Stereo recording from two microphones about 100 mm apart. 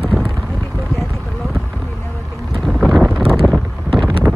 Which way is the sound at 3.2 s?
70° right (ahead or behind).